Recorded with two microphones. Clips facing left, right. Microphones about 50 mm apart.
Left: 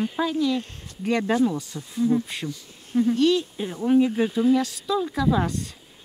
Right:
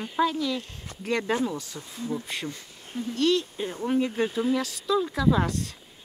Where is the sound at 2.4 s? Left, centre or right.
Centre.